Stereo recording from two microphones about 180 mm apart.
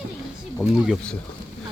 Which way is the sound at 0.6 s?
5° left (ahead or behind).